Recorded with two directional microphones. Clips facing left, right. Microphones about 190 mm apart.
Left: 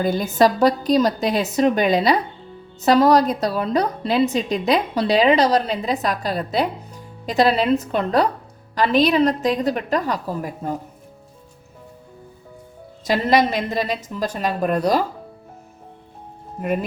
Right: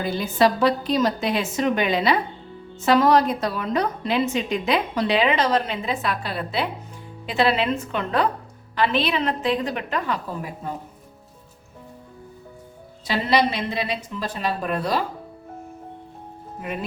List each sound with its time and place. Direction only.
0.0 s a woman's voice: 45° left (ahead or behind)
13.1 s a woman's voice: 45° left (ahead or behind)
16.6 s a woman's voice: 45° left (ahead or behind)